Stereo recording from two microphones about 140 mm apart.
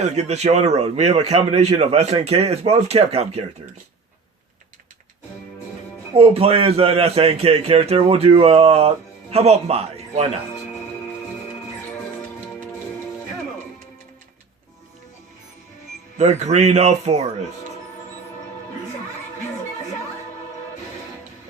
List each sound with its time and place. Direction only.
0.0 s a man's voice: 55° right (ahead or behind)
6.1 s a man's voice: 45° right (ahead or behind)
16.1 s a man's voice: 55° right (ahead or behind)